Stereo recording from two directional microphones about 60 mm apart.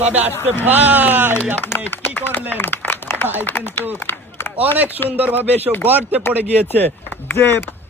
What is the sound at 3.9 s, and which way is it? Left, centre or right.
Run, left.